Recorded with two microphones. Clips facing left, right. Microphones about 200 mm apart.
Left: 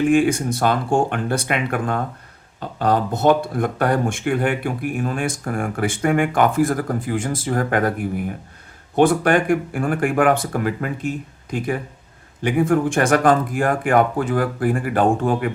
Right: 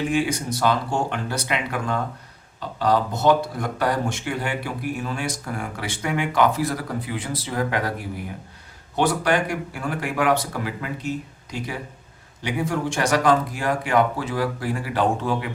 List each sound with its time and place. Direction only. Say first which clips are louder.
0.0 s speech: left 7 dB; 50° left (ahead or behind)